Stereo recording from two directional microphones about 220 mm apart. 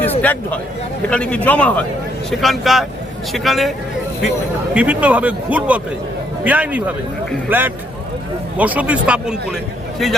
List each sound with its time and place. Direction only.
0.0 s a man's voice: 5° left (ahead or behind)
4.7 s a man's voice: 5° right (ahead or behind)